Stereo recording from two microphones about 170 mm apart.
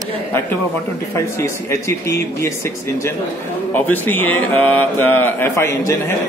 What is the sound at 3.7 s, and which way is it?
A man's voice, 10° left (ahead or behind).